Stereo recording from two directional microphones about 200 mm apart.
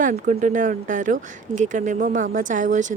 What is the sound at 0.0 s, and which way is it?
Speech, 40° right (ahead or behind).